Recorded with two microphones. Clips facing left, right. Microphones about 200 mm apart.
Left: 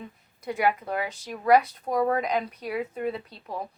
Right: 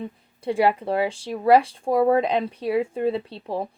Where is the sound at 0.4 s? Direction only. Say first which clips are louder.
Right 5 dB; 30° right (ahead or behind).